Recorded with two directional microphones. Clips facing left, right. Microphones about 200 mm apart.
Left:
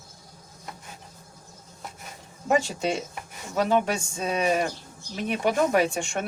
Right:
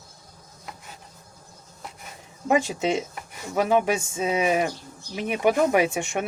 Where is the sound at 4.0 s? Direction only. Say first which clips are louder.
Right 2 dB; 5° right (ahead or behind).